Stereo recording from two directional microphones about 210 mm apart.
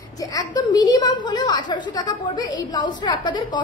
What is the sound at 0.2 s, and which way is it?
A woman's voice, 15° left (ahead or behind).